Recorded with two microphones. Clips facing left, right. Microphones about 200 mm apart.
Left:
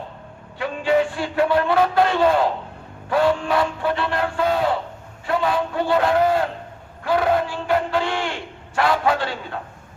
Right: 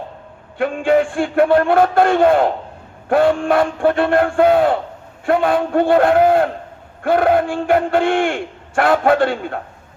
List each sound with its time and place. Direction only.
0.6 s a man's voice: 50° right (ahead or behind)